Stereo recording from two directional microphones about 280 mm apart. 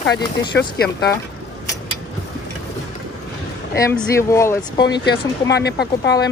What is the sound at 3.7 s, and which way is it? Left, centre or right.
Speech, centre.